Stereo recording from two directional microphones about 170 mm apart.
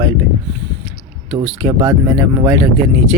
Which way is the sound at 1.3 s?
15° right (ahead or behind).